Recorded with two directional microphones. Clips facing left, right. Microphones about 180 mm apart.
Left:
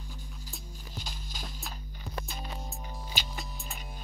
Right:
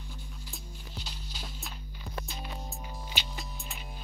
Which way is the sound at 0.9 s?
45° left (ahead or behind).